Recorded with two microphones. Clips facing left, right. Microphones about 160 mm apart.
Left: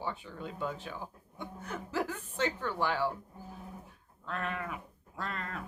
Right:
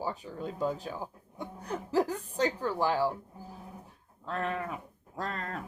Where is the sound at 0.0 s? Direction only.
40° right (ahead or behind).